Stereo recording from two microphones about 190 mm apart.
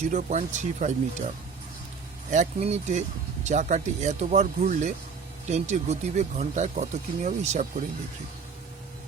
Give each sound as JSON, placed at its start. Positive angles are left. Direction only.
{"t": 0.0, "sound": "speech", "side_deg": -35}
{"t": 2.3, "sound": "speech", "side_deg": -35}